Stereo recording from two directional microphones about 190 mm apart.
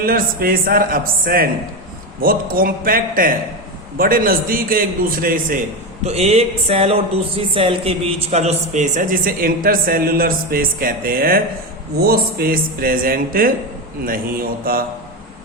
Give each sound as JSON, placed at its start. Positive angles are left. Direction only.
{"t": 0.0, "sound": "a man's voice", "side_deg": -50}
{"t": 6.0, "sound": "a man's voice", "side_deg": -35}
{"t": 14.6, "sound": "a man's voice", "side_deg": -50}